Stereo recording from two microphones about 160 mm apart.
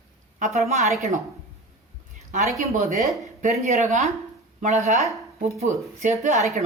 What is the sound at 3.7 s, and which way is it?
Speech, 45° right (ahead or behind).